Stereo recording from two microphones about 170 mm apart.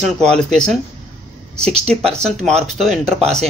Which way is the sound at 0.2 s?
5° left (ahead or behind).